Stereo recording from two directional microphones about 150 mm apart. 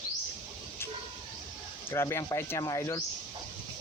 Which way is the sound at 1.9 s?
20° left (ahead or behind).